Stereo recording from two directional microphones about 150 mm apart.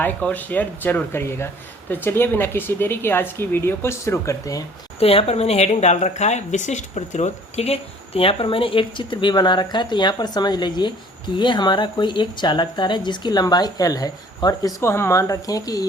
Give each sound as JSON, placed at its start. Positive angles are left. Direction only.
{"t": 0.0, "sound": "speech", "side_deg": 10}
{"t": 4.9, "sound": "speech", "side_deg": 40}